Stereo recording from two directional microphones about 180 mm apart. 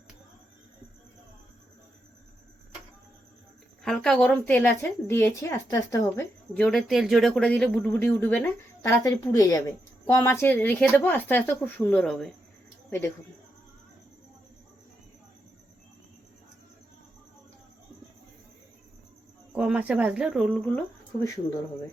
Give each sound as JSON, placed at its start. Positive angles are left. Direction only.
{"t": 3.8, "sound": "a woman's voice", "side_deg": 0}
{"t": 19.5, "sound": "speech", "side_deg": -5}
{"t": 21.2, "sound": "a woman's voice", "side_deg": 15}